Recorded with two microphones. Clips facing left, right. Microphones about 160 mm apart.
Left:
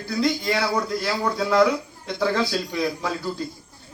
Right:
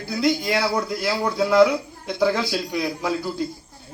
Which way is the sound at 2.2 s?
15° right (ahead or behind).